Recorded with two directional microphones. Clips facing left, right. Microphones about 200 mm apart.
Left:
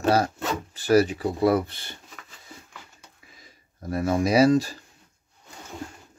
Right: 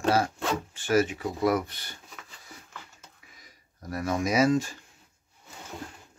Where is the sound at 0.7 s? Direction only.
35° left (ahead or behind).